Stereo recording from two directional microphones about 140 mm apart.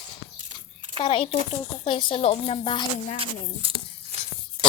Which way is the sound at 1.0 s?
40° left (ahead or behind).